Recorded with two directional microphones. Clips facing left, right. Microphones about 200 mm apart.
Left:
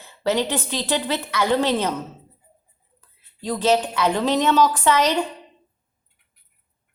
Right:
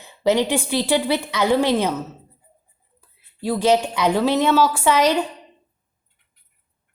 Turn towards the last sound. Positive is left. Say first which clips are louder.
# right 2 dB
turn(degrees=-10)  # may be behind; listen again after turning